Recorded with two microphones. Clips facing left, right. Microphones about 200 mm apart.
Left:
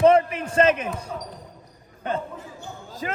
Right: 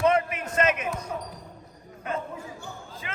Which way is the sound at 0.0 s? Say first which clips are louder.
Left 6 dB; 30° left (ahead or behind).